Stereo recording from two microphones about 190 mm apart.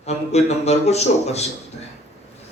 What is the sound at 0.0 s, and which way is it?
A man's voice, 35° left (ahead or behind).